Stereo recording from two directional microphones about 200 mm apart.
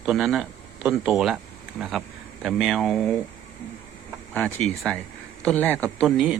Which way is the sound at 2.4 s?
Centre (ahead or behind).